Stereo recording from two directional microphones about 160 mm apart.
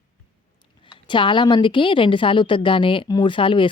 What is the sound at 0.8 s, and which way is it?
A woman's voice, 30° left (ahead or behind).